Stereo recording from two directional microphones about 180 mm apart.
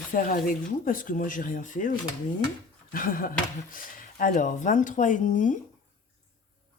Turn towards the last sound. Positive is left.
turn(degrees=45)  # may be behind; listen again after turning